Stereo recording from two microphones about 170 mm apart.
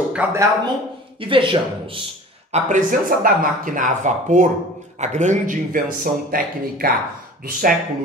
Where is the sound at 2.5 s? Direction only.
50° right (ahead or behind).